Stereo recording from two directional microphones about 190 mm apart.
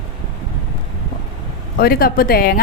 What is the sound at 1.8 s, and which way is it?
Speech, 55° left (ahead or behind).